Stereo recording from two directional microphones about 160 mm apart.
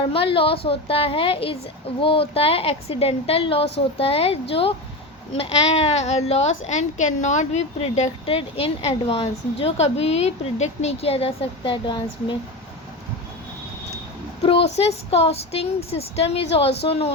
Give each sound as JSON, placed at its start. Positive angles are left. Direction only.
{"t": 0.1, "sound": "a woman's voice", "side_deg": 35}
{"t": 14.8, "sound": "a woman's voice", "side_deg": 40}